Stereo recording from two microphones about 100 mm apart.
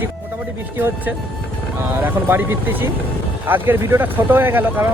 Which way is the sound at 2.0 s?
20° right (ahead or behind).